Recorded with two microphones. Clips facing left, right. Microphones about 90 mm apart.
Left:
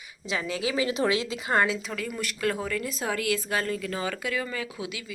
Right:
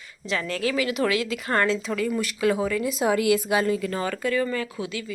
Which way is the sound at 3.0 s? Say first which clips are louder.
Right 8 dB; 20° right (ahead or behind).